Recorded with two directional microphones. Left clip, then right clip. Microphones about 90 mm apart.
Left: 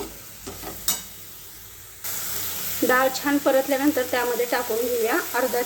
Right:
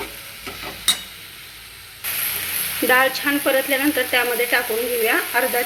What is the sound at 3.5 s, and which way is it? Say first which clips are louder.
A woman's voice: right 1 dB; 15° left (ahead or behind).